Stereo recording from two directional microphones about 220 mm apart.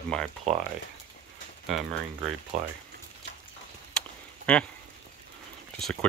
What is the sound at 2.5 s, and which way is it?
Speech, 30° right (ahead or behind).